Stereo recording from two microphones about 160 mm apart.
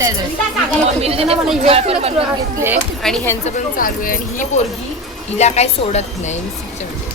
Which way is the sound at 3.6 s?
60° left (ahead or behind).